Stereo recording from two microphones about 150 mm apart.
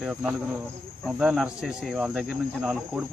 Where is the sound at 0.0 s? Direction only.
5° right (ahead or behind).